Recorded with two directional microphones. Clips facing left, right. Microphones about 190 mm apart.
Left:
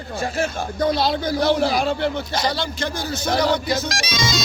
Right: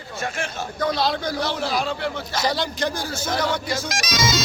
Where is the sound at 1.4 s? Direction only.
55° left (ahead or behind).